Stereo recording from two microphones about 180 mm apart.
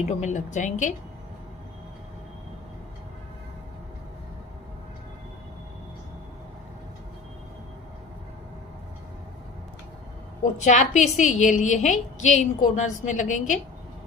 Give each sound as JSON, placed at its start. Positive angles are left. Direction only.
{"t": 0.0, "sound": "a woman's voice", "side_deg": 40}
{"t": 10.6, "sound": "a woman's voice", "side_deg": 40}